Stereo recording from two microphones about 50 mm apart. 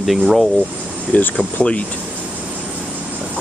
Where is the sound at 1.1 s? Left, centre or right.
Left.